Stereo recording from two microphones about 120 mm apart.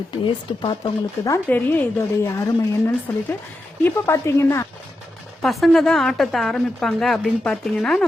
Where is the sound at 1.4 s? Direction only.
15° left (ahead or behind).